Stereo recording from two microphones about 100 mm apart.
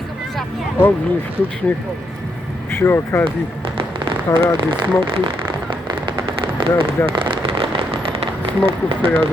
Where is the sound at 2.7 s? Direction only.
25° left (ahead or behind).